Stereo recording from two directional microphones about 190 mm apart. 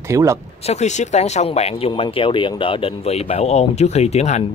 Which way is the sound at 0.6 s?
35° left (ahead or behind).